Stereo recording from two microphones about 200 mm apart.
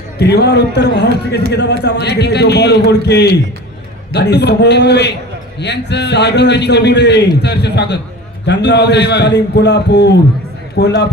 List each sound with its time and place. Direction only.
0.2 s a man's voice: 55° left (ahead or behind)